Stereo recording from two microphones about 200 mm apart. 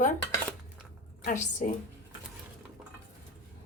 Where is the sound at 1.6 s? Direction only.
40° left (ahead or behind).